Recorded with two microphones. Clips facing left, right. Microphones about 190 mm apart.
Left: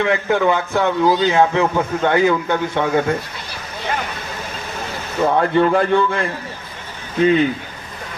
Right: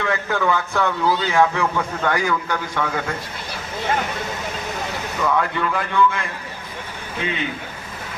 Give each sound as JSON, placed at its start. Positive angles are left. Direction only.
{"t": 0.0, "sound": "a man's voice", "side_deg": 20}
{"t": 5.2, "sound": "a man's voice", "side_deg": 35}